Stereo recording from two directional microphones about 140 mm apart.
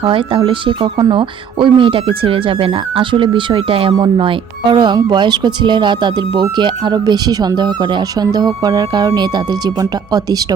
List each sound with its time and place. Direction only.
0.0 s speech: 40° right (ahead or behind)